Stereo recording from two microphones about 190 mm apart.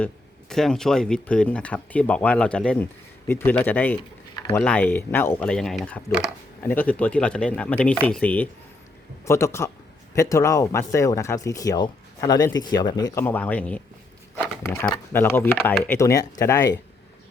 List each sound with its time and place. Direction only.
0.0 s speech: centre (ahead or behind)
4.4 s a sound: 15° left (ahead or behind)
4.6 s speech: 10° left (ahead or behind)